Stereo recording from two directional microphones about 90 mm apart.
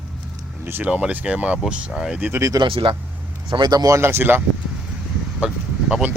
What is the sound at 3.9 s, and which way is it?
Speech, 25° right (ahead or behind).